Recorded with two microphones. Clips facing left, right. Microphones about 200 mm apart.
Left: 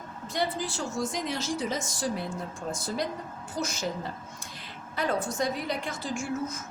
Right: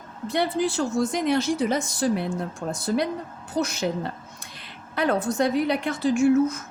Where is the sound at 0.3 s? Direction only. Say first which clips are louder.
Right 7 dB; 65° right (ahead or behind).